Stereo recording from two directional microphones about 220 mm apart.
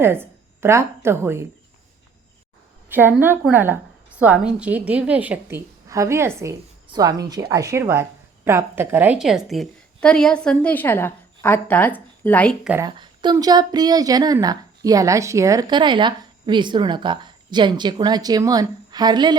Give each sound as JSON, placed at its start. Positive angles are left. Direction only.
{"t": 0.0, "sound": "a woman's voice", "side_deg": -10}
{"t": 2.9, "sound": "a woman's voice", "side_deg": -10}
{"t": 12.8, "sound": "a woman's voice", "side_deg": -20}